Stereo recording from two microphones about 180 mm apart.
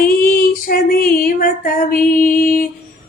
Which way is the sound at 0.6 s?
55° left (ahead or behind).